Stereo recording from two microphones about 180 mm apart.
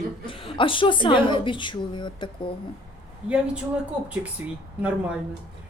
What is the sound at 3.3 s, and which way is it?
Speech, 5° right (ahead or behind).